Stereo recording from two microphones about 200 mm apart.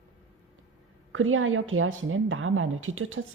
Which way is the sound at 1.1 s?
85° right.